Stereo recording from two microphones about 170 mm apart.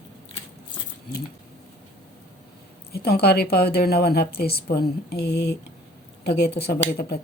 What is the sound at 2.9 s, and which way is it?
A woman's voice, 65° left (ahead or behind).